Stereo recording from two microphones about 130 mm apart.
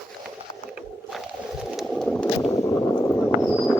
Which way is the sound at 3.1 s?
10° left (ahead or behind).